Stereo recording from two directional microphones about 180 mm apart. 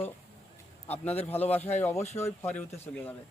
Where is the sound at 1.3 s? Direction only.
10° left (ahead or behind).